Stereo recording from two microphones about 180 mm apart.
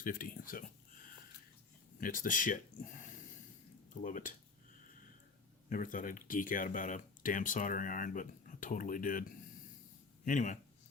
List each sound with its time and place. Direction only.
0.0 s speech: 50° left (ahead or behind)
2.0 s speech: 50° left (ahead or behind)
4.0 s speech: 50° left (ahead or behind)
5.6 s speech: 50° left (ahead or behind)
10.2 s speech: 45° left (ahead or behind)